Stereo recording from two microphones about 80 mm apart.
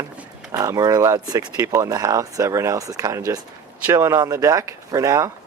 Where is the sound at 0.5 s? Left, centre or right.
Right.